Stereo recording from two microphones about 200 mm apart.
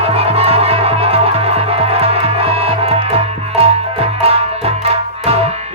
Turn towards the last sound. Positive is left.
turn(degrees=-30)  # may be behind; listen again after turning